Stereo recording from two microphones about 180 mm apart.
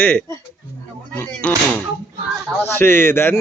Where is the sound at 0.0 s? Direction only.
10° left (ahead or behind).